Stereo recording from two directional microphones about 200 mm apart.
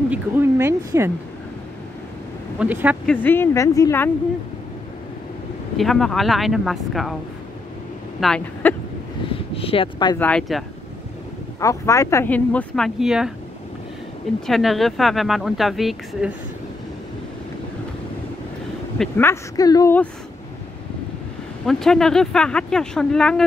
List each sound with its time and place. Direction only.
0.1 s speech: 10° right (ahead or behind)
2.6 s speech: 10° right (ahead or behind)
3.1 s speech: 10° left (ahead or behind)
5.8 s speech: centre (ahead or behind)
8.2 s speech: 5° left (ahead or behind)
9.6 s speech: 25° left (ahead or behind)
10.1 s speech: 5° left (ahead or behind)
11.6 s speech: 15° left (ahead or behind); by 13.3 s 5° right (ahead or behind)
14.4 s speech: centre (ahead or behind)
18.9 s speech: 10° left (ahead or behind)
21.6 s speech: centre (ahead or behind)